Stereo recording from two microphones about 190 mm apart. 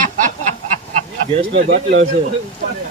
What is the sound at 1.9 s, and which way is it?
Speech, 80° right.